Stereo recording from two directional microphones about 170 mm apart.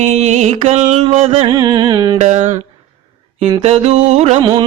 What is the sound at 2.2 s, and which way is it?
Music, 45° right (ahead or behind).